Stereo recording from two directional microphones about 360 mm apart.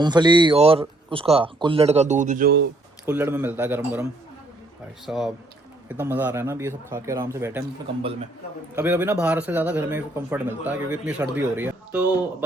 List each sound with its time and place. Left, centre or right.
0.0 s speech: centre
3.1 s speech: centre
5.0 s speech: centre
8.7 s speech: centre